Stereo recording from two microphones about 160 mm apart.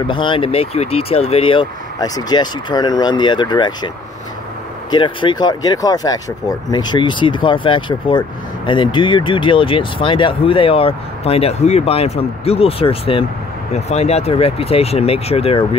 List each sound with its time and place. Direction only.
0.0 s speech: 30° left (ahead or behind)
4.9 s speech: 30° left (ahead or behind)